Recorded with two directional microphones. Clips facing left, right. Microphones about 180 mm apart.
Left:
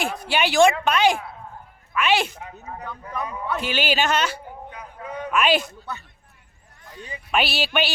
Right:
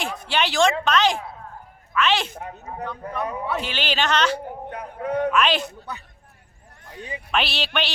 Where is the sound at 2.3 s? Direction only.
50° right (ahead or behind).